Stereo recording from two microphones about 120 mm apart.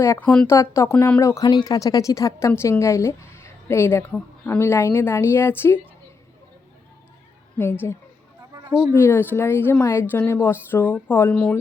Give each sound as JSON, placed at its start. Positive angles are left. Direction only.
{"t": 0.0, "sound": "a woman's voice", "side_deg": 20}
{"t": 7.6, "sound": "a woman's voice", "side_deg": 20}